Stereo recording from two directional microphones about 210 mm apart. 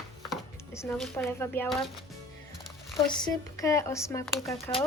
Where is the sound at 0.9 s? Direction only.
Centre (ahead or behind).